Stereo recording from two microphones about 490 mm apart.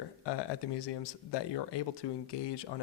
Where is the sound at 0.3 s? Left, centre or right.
Left.